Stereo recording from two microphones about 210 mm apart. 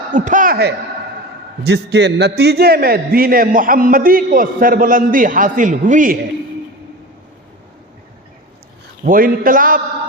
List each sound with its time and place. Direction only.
0.1 s a man's voice: 40° right (ahead or behind)
9.0 s a man's voice: 40° right (ahead or behind)